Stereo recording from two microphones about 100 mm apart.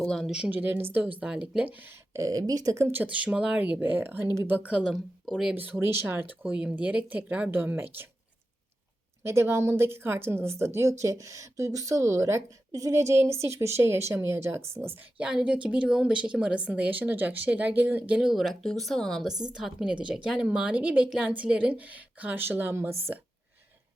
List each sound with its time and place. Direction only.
0.0 s speech: 5° left (ahead or behind)
0.3 s a woman's voice: 5° right (ahead or behind)
0.5 s speech: 20° right (ahead or behind)
1.2 s a woman's voice: 10° right (ahead or behind)
2.1 s a woman's voice: 35° right (ahead or behind); by 5.3 s 5° right (ahead or behind)
5.5 s a woman's voice: 20° right (ahead or behind)
9.2 s speech: 25° right (ahead or behind)
15.2 s a woman's voice: 10° right (ahead or behind)
19.5 s a woman's voice: 10° right (ahead or behind); by 23.1 s 25° right (ahead or behind)